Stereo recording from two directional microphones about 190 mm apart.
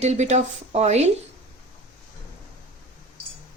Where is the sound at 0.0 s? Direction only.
35° right (ahead or behind).